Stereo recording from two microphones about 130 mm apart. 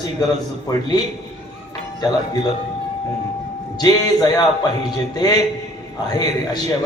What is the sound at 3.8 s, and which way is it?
Mantra, 30° left (ahead or behind).